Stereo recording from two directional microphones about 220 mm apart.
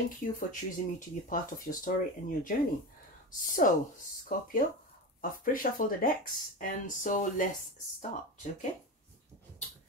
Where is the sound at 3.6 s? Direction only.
35° left (ahead or behind).